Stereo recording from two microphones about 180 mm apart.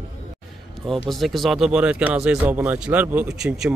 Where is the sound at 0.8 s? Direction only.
Centre (ahead or behind).